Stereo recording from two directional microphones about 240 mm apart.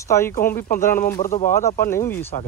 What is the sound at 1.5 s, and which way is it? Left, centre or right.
Speech, centre.